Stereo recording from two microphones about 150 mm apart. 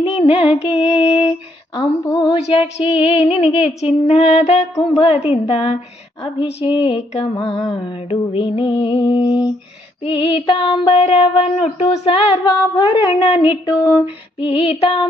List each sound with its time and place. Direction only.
0.1 s music: 40° left (ahead or behind)
0.6 s mantra: 40° left (ahead or behind)
1.8 s mantra: 30° left (ahead or behind)
2.8 s music: 40° left (ahead or behind)
4.9 s mantra: 40° left (ahead or behind)
11.0 s mantra: 45° left (ahead or behind)